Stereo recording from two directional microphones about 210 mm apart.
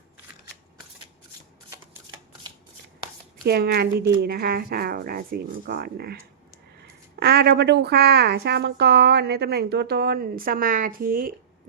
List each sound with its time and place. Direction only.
3.4 s speech: 50° right (ahead or behind)
7.2 s speech: 50° right (ahead or behind)